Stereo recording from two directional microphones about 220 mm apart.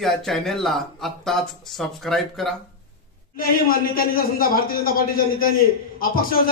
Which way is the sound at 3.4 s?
40° left (ahead or behind).